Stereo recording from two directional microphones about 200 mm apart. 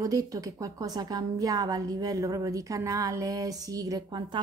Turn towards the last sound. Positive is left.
turn(degrees=-20)  # may be behind; listen again after turning